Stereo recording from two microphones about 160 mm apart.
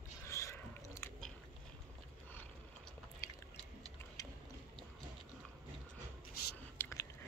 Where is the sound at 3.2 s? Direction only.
15° left (ahead or behind).